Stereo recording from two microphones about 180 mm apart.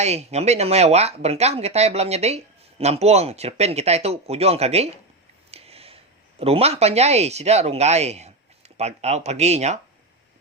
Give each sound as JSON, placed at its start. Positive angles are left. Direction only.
{"t": 0.0, "sound": "speech", "side_deg": -35}
{"t": 5.5, "sound": "a sound", "side_deg": -35}
{"t": 6.4, "sound": "speech", "side_deg": -35}